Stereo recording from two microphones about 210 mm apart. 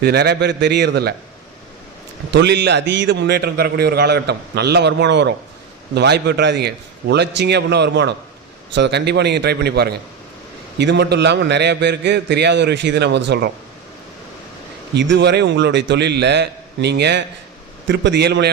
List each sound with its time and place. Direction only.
0.0 s a man's voice: 50° right (ahead or behind)
2.3 s a man's voice: 55° right (ahead or behind)
14.9 s a man's voice: 55° right (ahead or behind)